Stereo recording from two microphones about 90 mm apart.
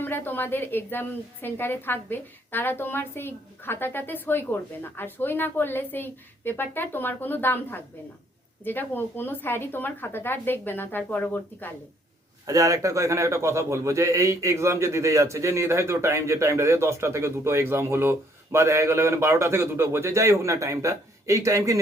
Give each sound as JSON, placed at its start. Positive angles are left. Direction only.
{"t": 0.0, "sound": "a woman's voice", "side_deg": 20}
{"t": 12.5, "sound": "a man's voice", "side_deg": -40}